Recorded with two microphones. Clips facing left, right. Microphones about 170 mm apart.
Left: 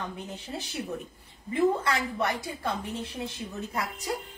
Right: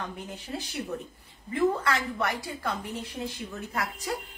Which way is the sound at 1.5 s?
25° left (ahead or behind).